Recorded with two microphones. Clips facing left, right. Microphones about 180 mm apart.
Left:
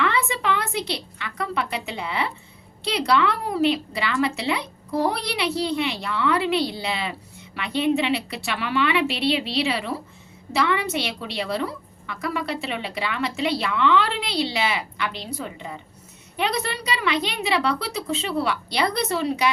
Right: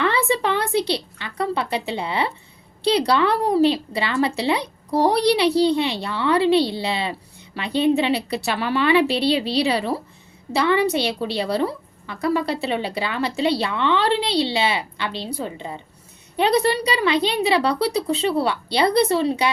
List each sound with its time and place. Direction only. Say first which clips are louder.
0.0 s a woman's voice: right 4 dB; 30° right (ahead or behind)